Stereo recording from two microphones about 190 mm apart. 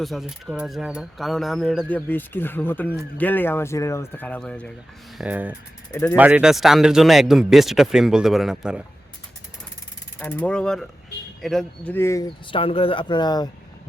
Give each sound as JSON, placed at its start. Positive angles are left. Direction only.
{"t": 0.0, "sound": "speech", "side_deg": 0}
{"t": 5.1, "sound": "speech", "side_deg": -5}
{"t": 5.9, "sound": "speech", "side_deg": 10}
{"t": 6.1, "sound": "speech", "side_deg": -10}
{"t": 10.2, "sound": "speech", "side_deg": 10}